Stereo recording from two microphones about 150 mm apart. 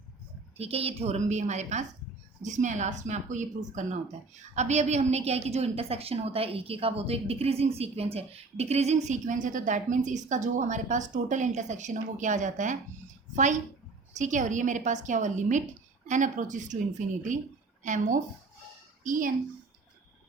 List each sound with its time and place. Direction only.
0.5 s a woman's voice: 40° right (ahead or behind); by 19.3 s 60° right (ahead or behind)